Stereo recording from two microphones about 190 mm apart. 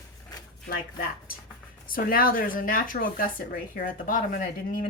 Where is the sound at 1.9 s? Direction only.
50° left (ahead or behind).